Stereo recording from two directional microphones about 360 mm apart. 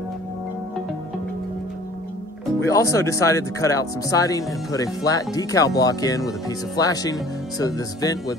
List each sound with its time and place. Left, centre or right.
2.4 s speech: centre